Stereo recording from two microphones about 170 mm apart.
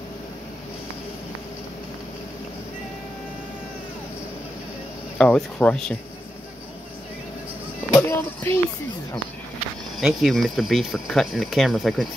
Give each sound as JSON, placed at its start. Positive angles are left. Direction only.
{"t": 5.1, "sound": "speech", "side_deg": 5}
{"t": 7.9, "sound": "a sound", "side_deg": 20}
{"t": 9.9, "sound": "speech", "side_deg": 0}